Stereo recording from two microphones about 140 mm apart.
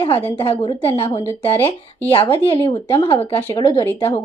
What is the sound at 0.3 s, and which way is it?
Speech, 40° left (ahead or behind).